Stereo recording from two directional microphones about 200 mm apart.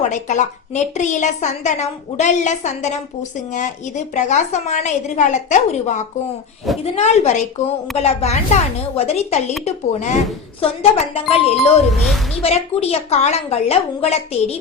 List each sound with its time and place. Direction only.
0.0 s a woman's voice: 35° left (ahead or behind)